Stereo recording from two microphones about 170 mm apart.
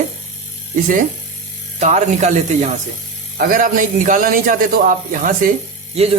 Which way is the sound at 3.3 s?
55° right (ahead or behind).